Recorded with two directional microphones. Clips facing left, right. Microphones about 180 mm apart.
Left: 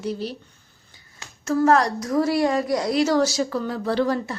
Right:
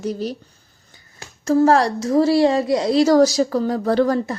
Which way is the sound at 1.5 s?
30° right (ahead or behind).